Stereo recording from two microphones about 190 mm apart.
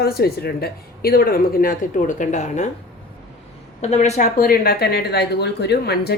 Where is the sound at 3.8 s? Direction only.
35° left (ahead or behind).